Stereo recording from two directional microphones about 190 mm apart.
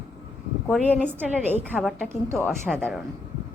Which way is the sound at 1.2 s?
10° right (ahead or behind).